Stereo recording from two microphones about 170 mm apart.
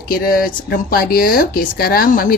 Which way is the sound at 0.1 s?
60° left (ahead or behind).